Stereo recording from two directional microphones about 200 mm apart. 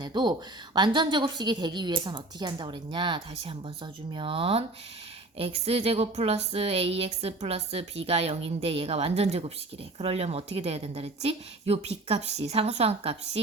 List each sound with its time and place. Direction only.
0.0 s a woman's voice: 20° right (ahead or behind)